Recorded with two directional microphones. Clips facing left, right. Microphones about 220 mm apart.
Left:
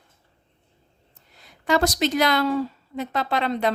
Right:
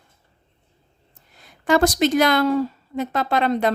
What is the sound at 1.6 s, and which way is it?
A woman's voice, 50° right (ahead or behind).